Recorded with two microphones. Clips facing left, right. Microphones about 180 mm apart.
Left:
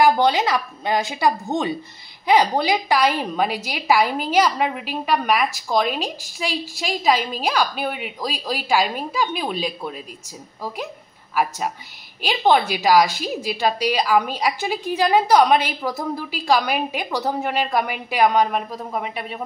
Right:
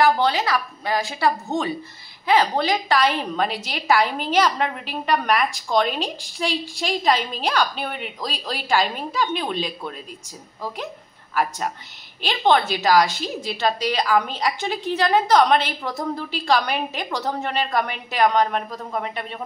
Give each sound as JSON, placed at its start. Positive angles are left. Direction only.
{"t": 0.0, "sound": "a woman's voice", "side_deg": 15}
{"t": 12.2, "sound": "a woman's voice", "side_deg": 10}